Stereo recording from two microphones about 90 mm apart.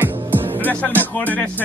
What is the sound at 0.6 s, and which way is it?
Music, 20° left (ahead or behind).